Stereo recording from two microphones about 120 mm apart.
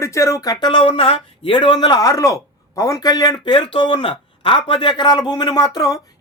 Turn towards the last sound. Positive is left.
turn(degrees=30)  # may be behind; listen again after turning